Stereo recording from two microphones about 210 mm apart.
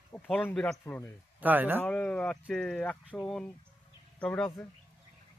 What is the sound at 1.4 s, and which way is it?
Speech, 10° right (ahead or behind).